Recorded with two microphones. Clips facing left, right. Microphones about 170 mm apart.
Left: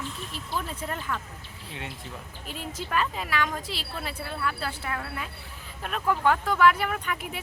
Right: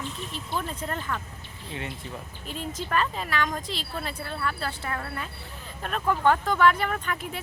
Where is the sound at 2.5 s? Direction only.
10° left (ahead or behind).